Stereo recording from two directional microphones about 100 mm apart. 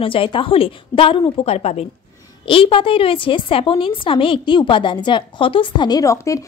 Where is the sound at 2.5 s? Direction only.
65° left (ahead or behind).